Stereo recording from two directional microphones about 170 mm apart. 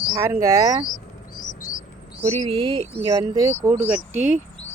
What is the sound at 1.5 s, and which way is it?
Bird, 50° left (ahead or behind).